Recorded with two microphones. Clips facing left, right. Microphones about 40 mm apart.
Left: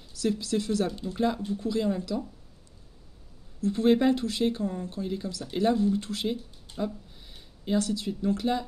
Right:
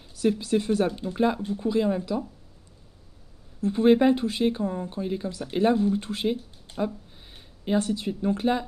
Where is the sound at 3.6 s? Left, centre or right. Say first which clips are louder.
Right 3 dB; right.